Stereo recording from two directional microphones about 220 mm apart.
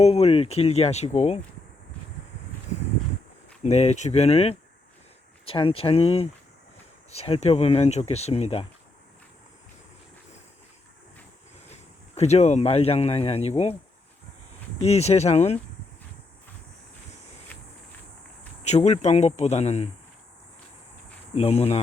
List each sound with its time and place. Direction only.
0.0 s speech: 30° left (ahead or behind)
3.6 s speech: 30° left (ahead or behind)
11.7 s speech: 30° left (ahead or behind)
14.8 s speech: 30° left (ahead or behind)
18.6 s speech: 30° left (ahead or behind)
21.3 s speech: 30° left (ahead or behind)